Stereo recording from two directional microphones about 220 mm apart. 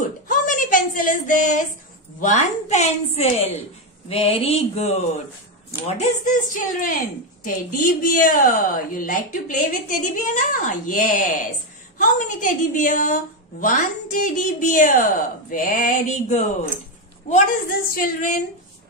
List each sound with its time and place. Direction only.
0.3 s a sound: 35° left (ahead or behind)
2.1 s a woman's voice: 35° left (ahead or behind)
5.9 s a woman's voice: 35° left (ahead or behind)